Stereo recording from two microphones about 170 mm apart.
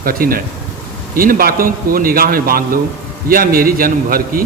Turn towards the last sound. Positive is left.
turn(degrees=-60)  # may be behind; listen again after turning